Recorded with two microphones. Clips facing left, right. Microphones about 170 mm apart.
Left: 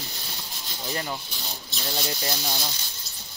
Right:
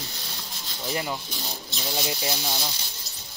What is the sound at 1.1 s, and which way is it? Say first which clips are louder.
Speech: right 2 dB; centre (ahead or behind).